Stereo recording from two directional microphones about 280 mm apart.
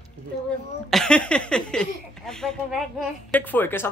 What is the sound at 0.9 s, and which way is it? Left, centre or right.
Speech, centre.